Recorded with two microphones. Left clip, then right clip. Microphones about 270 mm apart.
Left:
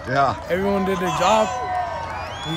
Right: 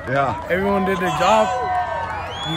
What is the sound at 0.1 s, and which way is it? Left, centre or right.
Speech, centre.